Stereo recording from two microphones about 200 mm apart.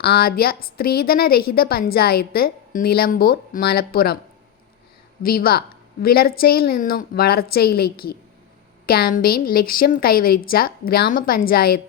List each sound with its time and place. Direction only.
0.0 s a woman's voice: 50° left (ahead or behind)
5.2 s a woman's voice: 45° left (ahead or behind)